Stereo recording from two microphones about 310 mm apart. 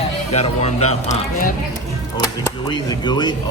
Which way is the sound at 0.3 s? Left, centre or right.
Centre.